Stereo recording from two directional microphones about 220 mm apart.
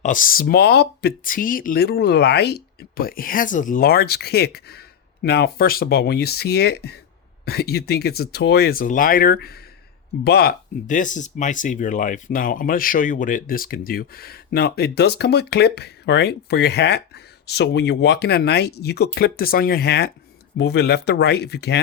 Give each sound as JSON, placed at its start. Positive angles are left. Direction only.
{"t": 0.0, "sound": "speech", "side_deg": 35}